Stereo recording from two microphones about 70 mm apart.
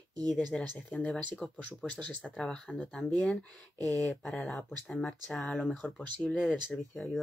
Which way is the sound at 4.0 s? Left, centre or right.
Centre.